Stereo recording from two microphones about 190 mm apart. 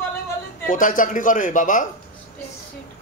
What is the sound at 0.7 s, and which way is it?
Speech, 45° left (ahead or behind).